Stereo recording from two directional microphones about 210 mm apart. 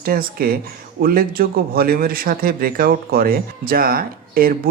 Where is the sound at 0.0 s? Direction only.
45° right (ahead or behind).